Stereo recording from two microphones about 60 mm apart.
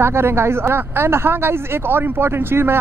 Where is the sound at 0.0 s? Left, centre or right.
Right.